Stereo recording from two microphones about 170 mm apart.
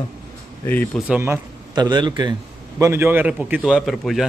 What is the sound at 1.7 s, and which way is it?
Speech, 25° right (ahead or behind).